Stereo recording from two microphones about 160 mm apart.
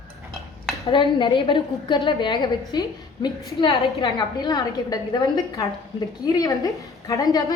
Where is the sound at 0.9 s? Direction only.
30° left (ahead or behind).